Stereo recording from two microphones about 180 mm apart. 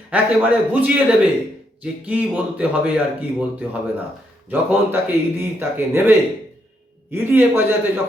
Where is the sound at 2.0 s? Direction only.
10° right (ahead or behind).